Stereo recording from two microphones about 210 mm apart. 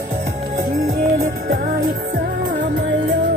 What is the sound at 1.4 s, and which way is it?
Music, 40° right (ahead or behind).